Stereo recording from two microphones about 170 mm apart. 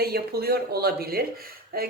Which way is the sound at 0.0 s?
65° right (ahead or behind).